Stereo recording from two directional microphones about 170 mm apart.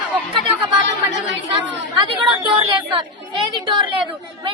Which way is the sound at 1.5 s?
30° right (ahead or behind).